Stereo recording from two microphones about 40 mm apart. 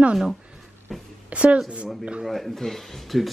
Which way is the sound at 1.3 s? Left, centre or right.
Right.